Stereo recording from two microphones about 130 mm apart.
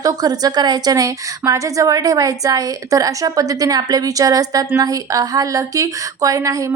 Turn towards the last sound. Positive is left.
turn(degrees=-25)  # may be behind; listen again after turning